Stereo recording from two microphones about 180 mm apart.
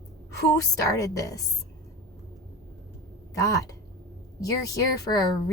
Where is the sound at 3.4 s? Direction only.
20° left (ahead or behind).